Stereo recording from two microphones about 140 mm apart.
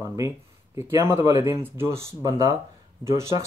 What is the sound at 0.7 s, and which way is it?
Speech, 20° right (ahead or behind).